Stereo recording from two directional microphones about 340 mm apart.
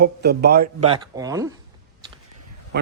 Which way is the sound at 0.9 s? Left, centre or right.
Centre.